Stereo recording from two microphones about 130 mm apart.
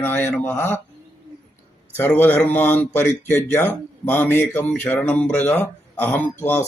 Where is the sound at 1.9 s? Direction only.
15° left (ahead or behind).